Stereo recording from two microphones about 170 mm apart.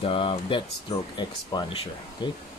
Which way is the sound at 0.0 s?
30° left (ahead or behind).